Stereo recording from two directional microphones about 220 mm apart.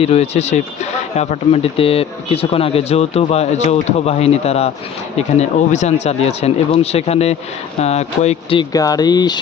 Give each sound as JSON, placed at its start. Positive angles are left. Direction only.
{"t": 0.0, "sound": "speech", "side_deg": 30}